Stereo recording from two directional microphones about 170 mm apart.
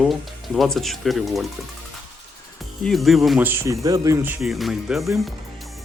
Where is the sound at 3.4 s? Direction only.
15° right (ahead or behind).